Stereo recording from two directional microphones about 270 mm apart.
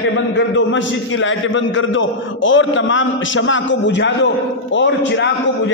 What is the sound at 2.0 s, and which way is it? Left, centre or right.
A man's voice, left.